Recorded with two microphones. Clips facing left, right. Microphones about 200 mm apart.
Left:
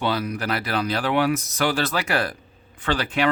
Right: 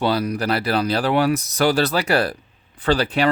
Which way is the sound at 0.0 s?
35° right (ahead or behind).